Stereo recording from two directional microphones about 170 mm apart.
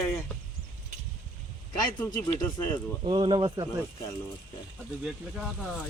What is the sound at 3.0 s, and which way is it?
Speech, 30° right (ahead or behind).